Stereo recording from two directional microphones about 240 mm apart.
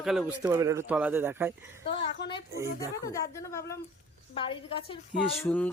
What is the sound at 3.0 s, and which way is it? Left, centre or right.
A woman's voice, centre.